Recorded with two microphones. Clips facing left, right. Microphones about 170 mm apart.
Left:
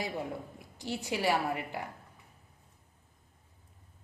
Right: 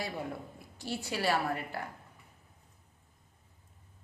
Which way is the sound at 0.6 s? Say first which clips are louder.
Right 1 dB; 15° left (ahead or behind).